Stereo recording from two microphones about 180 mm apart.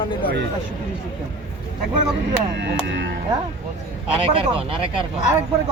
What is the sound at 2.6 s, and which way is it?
Speech, 75° right (ahead or behind).